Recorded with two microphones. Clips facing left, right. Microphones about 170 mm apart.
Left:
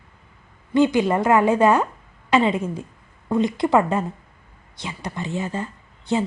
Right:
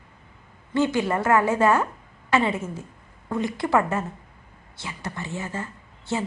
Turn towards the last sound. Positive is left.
turn(degrees=15)  # may be behind; listen again after turning